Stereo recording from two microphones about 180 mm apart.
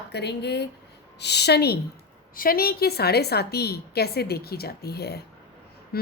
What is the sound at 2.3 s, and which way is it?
A woman's voice, 55° left (ahead or behind).